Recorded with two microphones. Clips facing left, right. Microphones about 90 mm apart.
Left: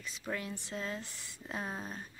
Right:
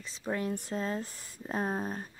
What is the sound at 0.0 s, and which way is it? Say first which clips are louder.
Speech: right 6 dB; 30° right (ahead or behind).